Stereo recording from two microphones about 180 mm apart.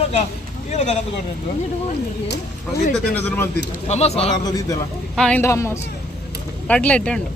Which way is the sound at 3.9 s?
35° left (ahead or behind).